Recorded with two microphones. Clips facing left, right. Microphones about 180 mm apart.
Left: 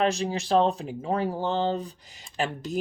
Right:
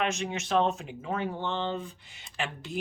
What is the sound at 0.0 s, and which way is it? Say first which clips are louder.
Speech: left 5 dB; 35° left (ahead or behind).